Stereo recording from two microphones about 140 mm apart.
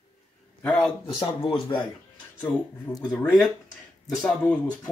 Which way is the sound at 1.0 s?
40° left (ahead or behind).